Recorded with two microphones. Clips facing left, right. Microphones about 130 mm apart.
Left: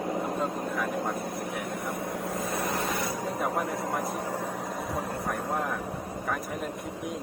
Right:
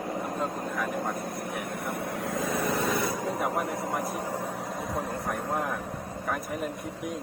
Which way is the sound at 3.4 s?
5° right (ahead or behind).